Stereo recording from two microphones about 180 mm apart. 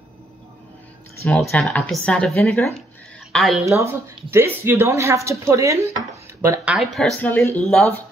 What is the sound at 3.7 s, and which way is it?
Speech, 15° right (ahead or behind).